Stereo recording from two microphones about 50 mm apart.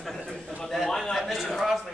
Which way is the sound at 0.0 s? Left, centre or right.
Centre.